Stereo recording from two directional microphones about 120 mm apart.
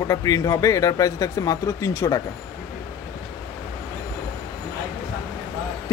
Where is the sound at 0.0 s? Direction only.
30° left (ahead or behind).